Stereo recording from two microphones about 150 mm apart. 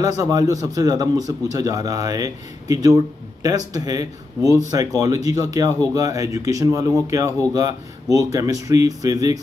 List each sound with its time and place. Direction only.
0.0 s speech: 25° right (ahead or behind)